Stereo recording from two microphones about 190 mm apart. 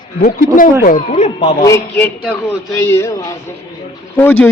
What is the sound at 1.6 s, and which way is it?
Speech, 15° left (ahead or behind).